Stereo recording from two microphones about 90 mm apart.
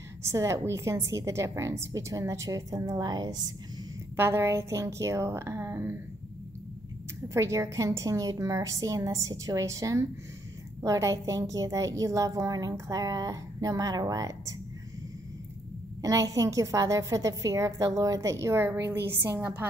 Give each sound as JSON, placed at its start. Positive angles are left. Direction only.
{"t": 0.2, "sound": "a woman's voice", "side_deg": -35}
{"t": 4.2, "sound": "a woman's voice", "side_deg": -30}
{"t": 7.3, "sound": "a woman's voice", "side_deg": -35}
{"t": 16.0, "sound": "a woman's voice", "side_deg": -40}